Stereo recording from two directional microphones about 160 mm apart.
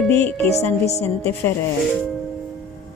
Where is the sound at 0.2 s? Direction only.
10° left (ahead or behind).